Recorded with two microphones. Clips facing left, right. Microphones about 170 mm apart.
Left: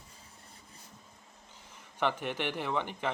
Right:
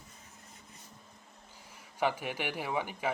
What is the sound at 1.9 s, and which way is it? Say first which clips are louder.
A man's voice: even; 10° right (ahead or behind).